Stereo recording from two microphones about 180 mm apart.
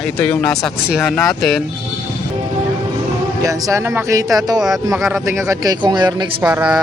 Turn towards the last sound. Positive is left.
turn(degrees=-5)  # may be behind; listen again after turning